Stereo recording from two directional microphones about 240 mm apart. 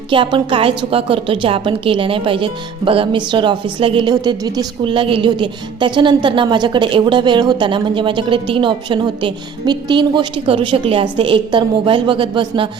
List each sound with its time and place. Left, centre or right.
0.1 s a woman's voice: right